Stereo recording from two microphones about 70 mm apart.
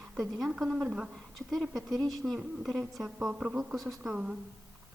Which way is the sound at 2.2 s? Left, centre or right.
Centre.